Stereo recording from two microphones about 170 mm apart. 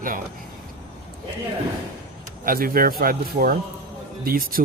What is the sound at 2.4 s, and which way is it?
A man's voice, 60° right (ahead or behind).